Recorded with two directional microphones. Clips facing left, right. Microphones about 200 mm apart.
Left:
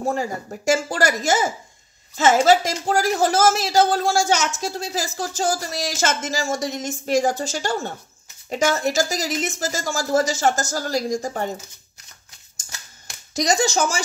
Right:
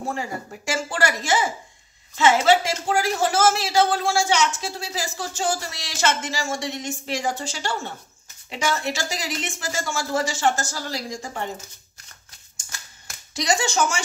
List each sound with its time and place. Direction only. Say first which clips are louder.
0.1 s speech: left 4 dB; 40° left (ahead or behind)
13.3 s speech: left 4 dB; 40° left (ahead or behind)